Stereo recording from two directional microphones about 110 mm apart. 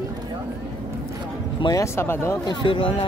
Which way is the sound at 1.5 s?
40° left (ahead or behind).